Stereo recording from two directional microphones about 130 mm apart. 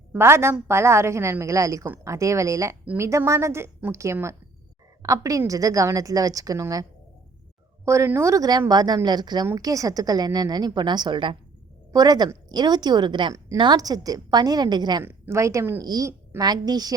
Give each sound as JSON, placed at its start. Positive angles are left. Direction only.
{"t": 0.1, "sound": "a woman's voice", "side_deg": -20}
{"t": 2.8, "sound": "a woman's voice", "side_deg": -10}
{"t": 3.1, "sound": "a woman's voice", "side_deg": -20}
{"t": 7.9, "sound": "a woman's voice", "side_deg": -20}
{"t": 15.0, "sound": "a woman's voice", "side_deg": -20}